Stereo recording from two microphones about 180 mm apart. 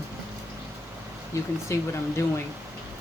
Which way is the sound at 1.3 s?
15° left (ahead or behind).